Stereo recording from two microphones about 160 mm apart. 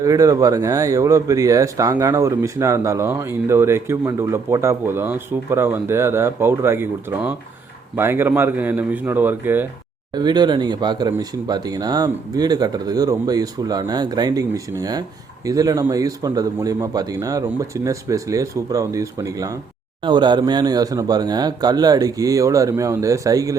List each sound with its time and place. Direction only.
0.0 s speech: 20° right (ahead or behind)
10.2 s speech: 25° right (ahead or behind)